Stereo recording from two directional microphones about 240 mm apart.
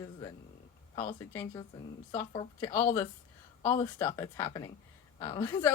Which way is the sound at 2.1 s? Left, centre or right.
Centre.